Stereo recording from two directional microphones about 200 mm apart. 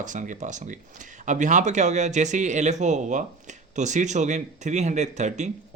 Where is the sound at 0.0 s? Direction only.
40° right (ahead or behind).